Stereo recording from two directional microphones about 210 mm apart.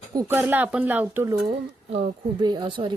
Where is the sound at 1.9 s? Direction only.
20° right (ahead or behind).